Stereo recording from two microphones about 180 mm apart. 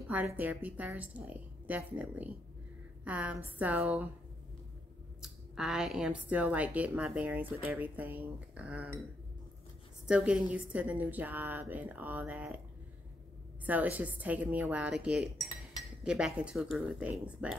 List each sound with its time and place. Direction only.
0.0 s a woman's voice: 10° right (ahead or behind)
5.2 s a woman's voice: centre (ahead or behind)
10.0 s a woman's voice: 5° right (ahead or behind)
13.7 s a woman's voice: 10° right (ahead or behind)
16.0 s cutlery: 5° right (ahead or behind)
17.3 s a woman's voice: 5° right (ahead or behind)